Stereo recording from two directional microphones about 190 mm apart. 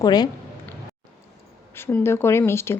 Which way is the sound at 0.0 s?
20° left (ahead or behind).